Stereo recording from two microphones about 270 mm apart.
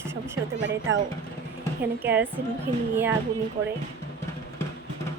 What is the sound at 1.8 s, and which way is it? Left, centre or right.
Speech, centre.